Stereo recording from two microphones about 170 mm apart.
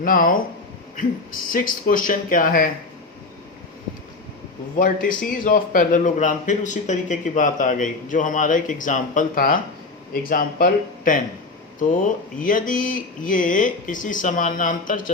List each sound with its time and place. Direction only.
0.0 s a man's voice: 55° left (ahead or behind)
4.8 s a man's voice: 55° left (ahead or behind)